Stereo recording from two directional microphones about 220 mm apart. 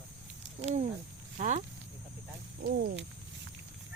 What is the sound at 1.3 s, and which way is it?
Speech, 30° right (ahead or behind).